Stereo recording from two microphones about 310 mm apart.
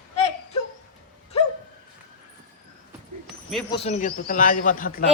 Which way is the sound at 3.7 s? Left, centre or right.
Centre.